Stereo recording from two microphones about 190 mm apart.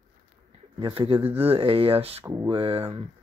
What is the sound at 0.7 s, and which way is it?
Speech, 25° right (ahead or behind).